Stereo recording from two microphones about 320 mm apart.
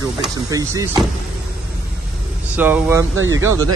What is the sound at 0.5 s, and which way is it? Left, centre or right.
Speech, centre.